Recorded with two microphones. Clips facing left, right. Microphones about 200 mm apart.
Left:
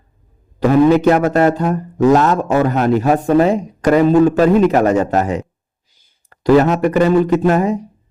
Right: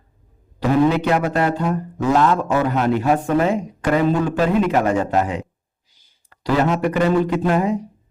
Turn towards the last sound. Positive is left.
turn(degrees=45)  # may be behind; listen again after turning